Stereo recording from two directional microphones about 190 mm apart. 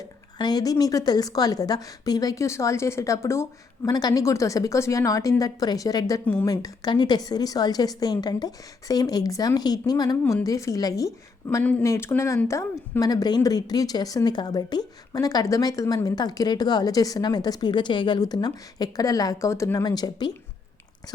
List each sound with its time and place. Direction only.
0.3 s a woman's voice: 20° left (ahead or behind)